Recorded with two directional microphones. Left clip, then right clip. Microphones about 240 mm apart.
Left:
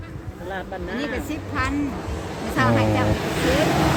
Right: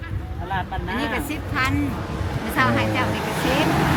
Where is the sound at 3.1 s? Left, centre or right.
Left.